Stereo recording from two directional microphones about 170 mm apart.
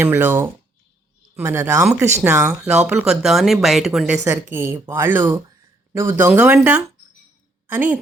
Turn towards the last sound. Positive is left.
turn(degrees=-10)  # may be behind; listen again after turning